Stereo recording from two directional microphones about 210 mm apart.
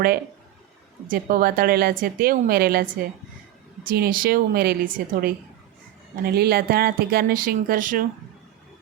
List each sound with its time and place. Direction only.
1.0 s a woman's voice: 40° right (ahead or behind)